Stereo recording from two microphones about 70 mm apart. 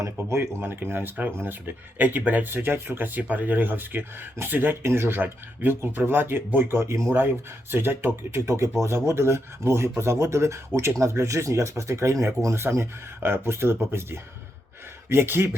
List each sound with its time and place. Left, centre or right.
0.3 s speech: right
7.1 s speech: right